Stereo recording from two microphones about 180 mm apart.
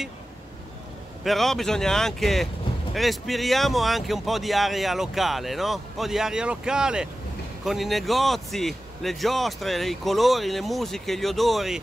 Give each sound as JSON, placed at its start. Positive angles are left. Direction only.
{"t": 1.2, "sound": "speech", "side_deg": 0}